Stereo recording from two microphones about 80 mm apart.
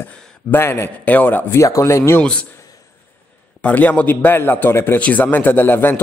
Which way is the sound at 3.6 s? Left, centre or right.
Centre.